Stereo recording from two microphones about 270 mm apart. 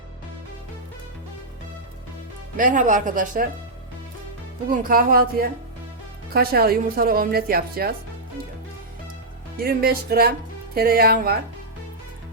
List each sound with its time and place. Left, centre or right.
2.6 s a woman's voice: right
4.7 s speech: right
9.6 s speech: right